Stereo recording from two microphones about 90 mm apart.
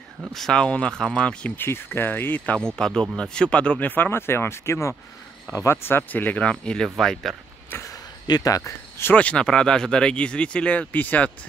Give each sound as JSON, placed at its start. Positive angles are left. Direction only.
{"t": 0.3, "sound": "speech", "side_deg": 5}
{"t": 1.6, "sound": "speech", "side_deg": 25}
{"t": 2.7, "sound": "speech", "side_deg": 5}
{"t": 7.9, "sound": "a sound", "side_deg": 40}
{"t": 9.1, "sound": "speech", "side_deg": 15}